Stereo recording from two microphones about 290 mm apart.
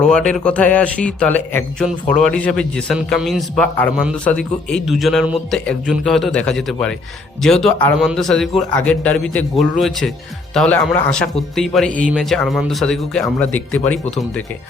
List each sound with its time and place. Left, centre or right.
0.0 s speech: centre